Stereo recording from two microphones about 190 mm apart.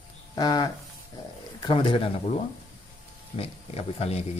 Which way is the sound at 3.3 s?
30° left (ahead or behind).